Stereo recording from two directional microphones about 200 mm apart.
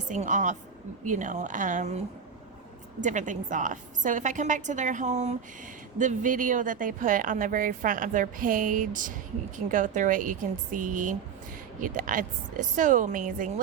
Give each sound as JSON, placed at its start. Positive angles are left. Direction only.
{"t": 0.1, "sound": "speech", "side_deg": -40}
{"t": 3.0, "sound": "speech", "side_deg": -40}